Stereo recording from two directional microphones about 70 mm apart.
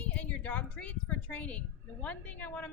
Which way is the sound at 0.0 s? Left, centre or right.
Left.